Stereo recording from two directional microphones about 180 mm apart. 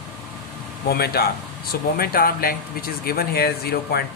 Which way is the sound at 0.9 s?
60° left (ahead or behind).